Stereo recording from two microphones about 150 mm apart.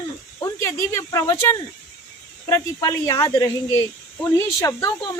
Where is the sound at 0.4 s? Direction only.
20° left (ahead or behind).